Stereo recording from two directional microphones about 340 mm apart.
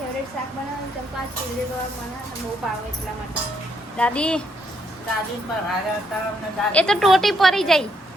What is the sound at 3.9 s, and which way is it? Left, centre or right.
Speech, centre.